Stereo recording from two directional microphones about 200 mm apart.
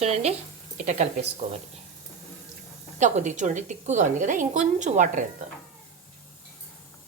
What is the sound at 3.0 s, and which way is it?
A woman's voice, 35° right (ahead or behind).